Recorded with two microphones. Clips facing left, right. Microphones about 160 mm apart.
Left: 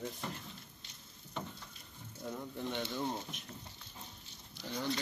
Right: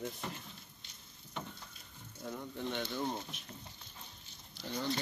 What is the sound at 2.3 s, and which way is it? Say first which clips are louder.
Speech: even; 5° left (ahead or behind).